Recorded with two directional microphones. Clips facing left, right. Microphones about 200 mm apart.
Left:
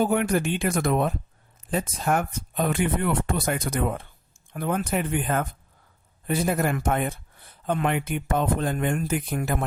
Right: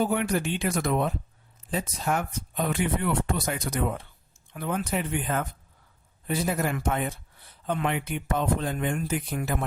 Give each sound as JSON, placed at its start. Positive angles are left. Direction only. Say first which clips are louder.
{"t": 0.0, "sound": "speech", "louder": "left 3 dB", "side_deg": 50}